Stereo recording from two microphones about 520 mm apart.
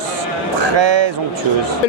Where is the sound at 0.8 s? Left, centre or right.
Right.